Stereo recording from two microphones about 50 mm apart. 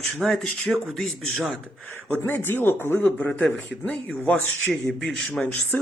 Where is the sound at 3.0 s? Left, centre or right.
Left.